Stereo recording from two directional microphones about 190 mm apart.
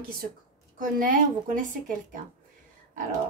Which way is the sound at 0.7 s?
45° right (ahead or behind).